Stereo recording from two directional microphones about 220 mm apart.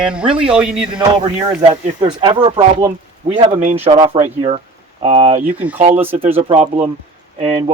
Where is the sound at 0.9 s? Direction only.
20° right (ahead or behind).